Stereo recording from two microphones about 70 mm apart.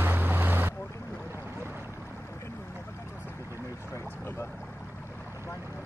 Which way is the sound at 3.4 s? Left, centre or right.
Right.